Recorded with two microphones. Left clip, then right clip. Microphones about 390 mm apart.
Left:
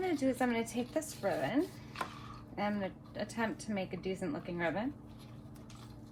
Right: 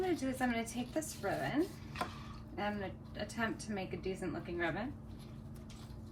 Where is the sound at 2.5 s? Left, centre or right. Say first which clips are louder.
Left 3 dB; left.